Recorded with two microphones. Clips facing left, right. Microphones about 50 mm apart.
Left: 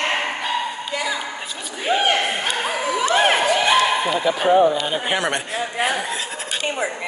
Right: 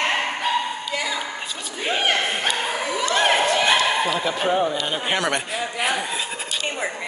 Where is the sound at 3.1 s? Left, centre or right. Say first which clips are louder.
Left 2 dB; centre.